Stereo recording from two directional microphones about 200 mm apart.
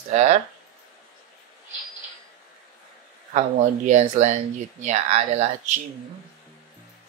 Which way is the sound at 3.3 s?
35° right (ahead or behind).